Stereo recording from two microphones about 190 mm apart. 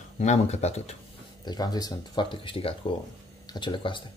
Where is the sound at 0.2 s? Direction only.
35° left (ahead or behind).